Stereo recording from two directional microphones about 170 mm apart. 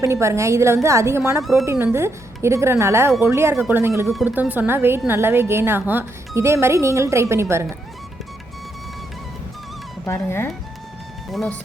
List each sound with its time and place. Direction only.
0.0 s speech: 15° right (ahead or behind)
10.1 s speech: 15° left (ahead or behind)
11.3 s speech: centre (ahead or behind)